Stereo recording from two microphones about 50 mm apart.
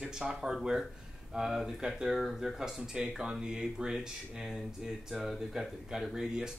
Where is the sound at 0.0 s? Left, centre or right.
Centre.